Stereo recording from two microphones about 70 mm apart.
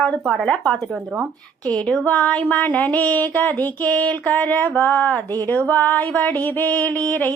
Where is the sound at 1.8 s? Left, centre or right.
Centre.